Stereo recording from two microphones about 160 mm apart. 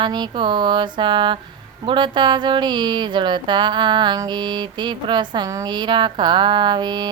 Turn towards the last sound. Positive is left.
turn(degrees=-25)  # may be behind; listen again after turning